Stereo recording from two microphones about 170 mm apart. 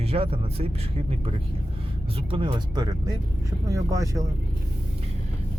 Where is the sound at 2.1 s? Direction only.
30° right (ahead or behind).